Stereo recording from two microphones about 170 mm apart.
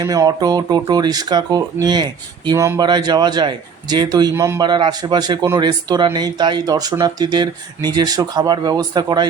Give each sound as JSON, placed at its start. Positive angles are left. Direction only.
{"t": 0.0, "sound": "speech", "side_deg": -20}